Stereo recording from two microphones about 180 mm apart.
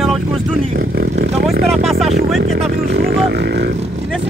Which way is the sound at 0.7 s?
55° right (ahead or behind).